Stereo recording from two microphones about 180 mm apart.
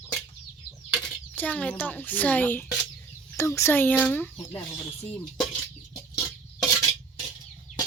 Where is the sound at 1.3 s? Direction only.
10° left (ahead or behind).